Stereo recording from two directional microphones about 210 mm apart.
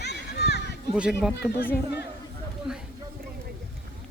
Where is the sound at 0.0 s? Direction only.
55° left (ahead or behind).